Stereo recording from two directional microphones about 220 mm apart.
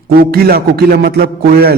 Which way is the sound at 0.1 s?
45° right (ahead or behind).